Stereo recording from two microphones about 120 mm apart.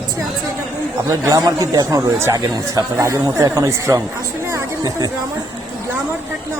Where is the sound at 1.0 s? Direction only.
30° right (ahead or behind).